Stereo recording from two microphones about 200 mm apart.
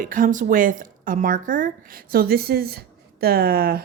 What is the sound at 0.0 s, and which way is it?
Speech, 45° right (ahead or behind).